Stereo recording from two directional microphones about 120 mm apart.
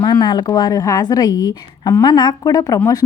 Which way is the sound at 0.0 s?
35° left (ahead or behind).